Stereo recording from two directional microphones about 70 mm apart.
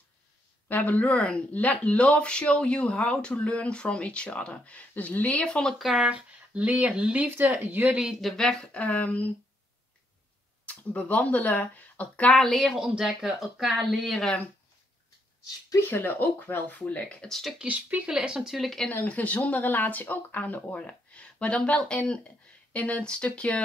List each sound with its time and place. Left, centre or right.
0.7 s speech: left
5.8 s speech: centre; by 7.9 s right
7.9 s speech: centre
8.2 s speech: centre
8.7 s speech: left
10.6 s speech: left
12.4 s speech: centre
12.7 s speech: centre
15.8 s speech: left
16.8 s speech: centre
17.3 s speech: centre
17.6 s speech: centre
18.9 s speech: left